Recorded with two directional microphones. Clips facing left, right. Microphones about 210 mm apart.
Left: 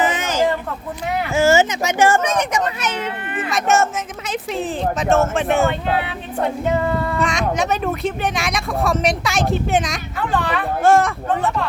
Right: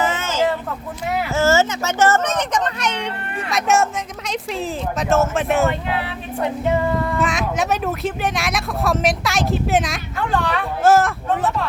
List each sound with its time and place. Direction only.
0.0 s a sound: 15° left (ahead or behind)
1.3 s speech: 15° left (ahead or behind); by 5.7 s centre (ahead or behind)
6.8 s speech: centre (ahead or behind)